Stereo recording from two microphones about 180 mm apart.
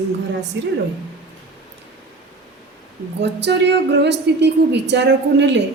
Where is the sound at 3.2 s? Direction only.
70° right (ahead or behind).